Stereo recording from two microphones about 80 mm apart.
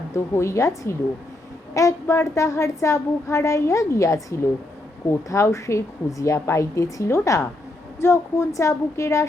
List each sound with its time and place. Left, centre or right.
0.1 s a woman's voice: left
1.7 s a woman's voice: left